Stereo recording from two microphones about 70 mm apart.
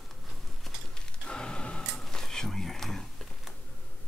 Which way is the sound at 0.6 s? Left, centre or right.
Centre.